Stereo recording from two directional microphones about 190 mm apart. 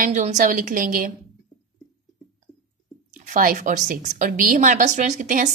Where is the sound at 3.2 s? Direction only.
40° right (ahead or behind).